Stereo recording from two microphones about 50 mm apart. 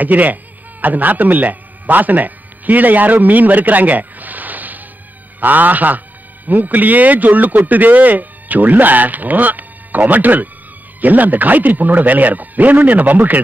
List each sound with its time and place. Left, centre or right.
0.0 s a man's voice: right